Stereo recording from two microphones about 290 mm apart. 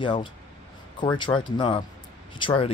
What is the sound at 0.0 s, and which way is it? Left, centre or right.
Speech, centre.